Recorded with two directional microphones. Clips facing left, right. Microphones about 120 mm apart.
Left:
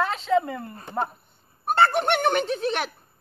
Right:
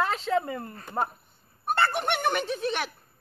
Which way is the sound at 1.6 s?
55° left (ahead or behind).